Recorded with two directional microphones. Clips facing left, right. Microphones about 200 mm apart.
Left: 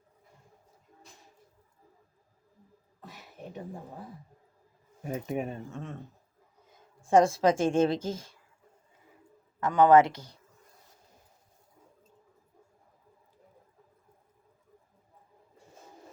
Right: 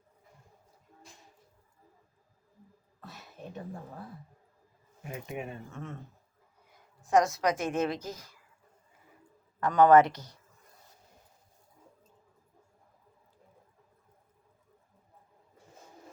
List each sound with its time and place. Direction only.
3.0 s a sound: 15° left (ahead or behind)
5.0 s speech: 40° left (ahead or behind)
5.7 s speech: 15° left (ahead or behind)
6.7 s a woman's voice: 30° left (ahead or behind)
9.6 s speech: 15° left (ahead or behind)